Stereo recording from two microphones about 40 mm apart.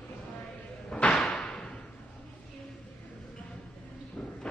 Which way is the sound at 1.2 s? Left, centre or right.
Centre.